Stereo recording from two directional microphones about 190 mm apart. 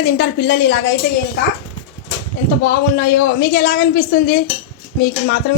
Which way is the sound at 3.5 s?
50° left (ahead or behind).